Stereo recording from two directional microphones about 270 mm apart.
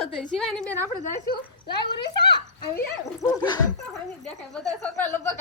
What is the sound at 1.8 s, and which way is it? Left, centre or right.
A woman's voice, centre.